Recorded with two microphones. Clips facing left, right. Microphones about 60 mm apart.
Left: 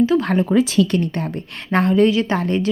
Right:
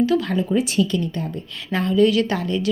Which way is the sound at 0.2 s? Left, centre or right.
Left.